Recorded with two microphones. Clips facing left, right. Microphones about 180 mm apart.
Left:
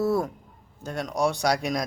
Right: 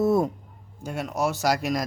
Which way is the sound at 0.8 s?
10° right (ahead or behind).